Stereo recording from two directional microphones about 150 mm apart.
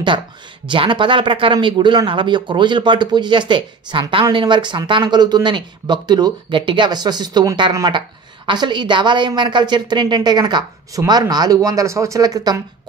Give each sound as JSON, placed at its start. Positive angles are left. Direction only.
{"t": 0.7, "sound": "a woman's voice", "side_deg": -35}